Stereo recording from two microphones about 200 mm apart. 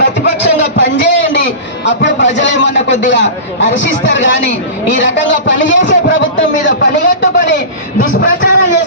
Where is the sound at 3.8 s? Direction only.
65° left (ahead or behind).